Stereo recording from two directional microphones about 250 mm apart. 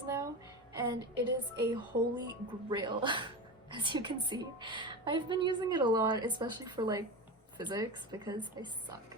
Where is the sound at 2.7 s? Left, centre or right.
Centre.